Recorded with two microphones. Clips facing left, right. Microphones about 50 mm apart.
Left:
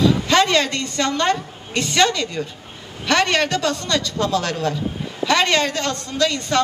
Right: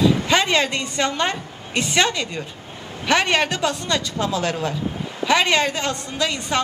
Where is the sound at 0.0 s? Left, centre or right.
Centre.